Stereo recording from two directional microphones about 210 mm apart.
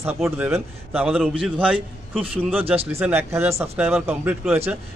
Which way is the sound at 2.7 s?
30° right (ahead or behind).